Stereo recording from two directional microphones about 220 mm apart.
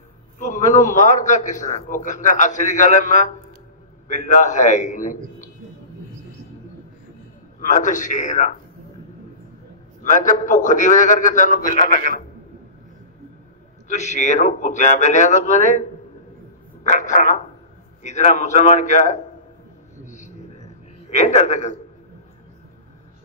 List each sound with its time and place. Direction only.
0.4 s a man's voice: 35° left (ahead or behind)
7.6 s a man's voice: 35° left (ahead or behind)
10.0 s a man's voice: 35° left (ahead or behind)
13.8 s a man's voice: 30° left (ahead or behind)
17.0 s a man's voice: 35° left (ahead or behind)
20.1 s a sound: 35° left (ahead or behind)
21.1 s a man's voice: 30° left (ahead or behind)